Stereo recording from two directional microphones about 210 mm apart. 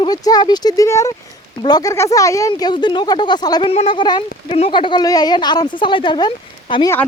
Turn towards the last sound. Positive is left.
turn(degrees=20)  # may be behind; listen again after turning